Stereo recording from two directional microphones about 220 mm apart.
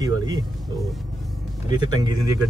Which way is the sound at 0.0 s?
20° right (ahead or behind).